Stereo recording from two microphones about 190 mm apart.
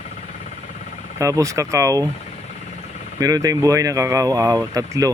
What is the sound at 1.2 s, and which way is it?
Speech, 15° right (ahead or behind).